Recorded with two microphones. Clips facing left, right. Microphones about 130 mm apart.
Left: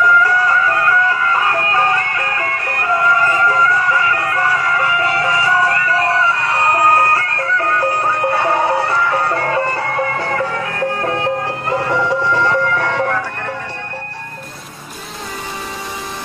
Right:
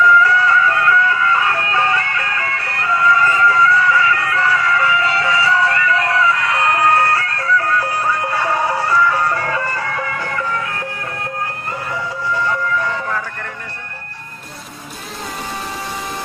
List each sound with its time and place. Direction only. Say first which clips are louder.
0.2 s music: right 1 dB; 40° left (ahead or behind); by 9.2 s 60° left (ahead or behind)
9.3 s music: left 3 dB; 50° left (ahead or behind); by 13.1 s 70° left (ahead or behind)